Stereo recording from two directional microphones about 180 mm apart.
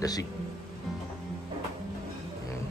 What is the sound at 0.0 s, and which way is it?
Speech, 20° left (ahead or behind).